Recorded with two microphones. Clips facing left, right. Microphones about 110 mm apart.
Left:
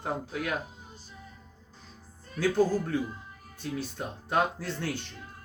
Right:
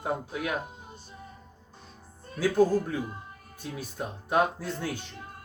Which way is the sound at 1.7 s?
50° right (ahead or behind).